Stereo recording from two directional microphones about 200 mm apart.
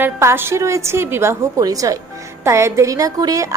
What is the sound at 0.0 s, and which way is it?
A woman's voice, 10° right (ahead or behind).